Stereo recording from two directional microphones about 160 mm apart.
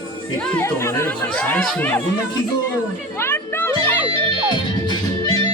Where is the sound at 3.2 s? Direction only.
15° left (ahead or behind).